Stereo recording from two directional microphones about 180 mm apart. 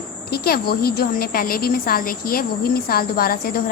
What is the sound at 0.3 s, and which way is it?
A woman's voice, 60° left (ahead or behind).